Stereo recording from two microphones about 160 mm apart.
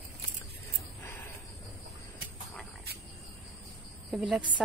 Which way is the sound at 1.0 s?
15° left (ahead or behind).